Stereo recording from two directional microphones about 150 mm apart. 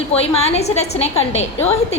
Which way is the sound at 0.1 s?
45° left (ahead or behind).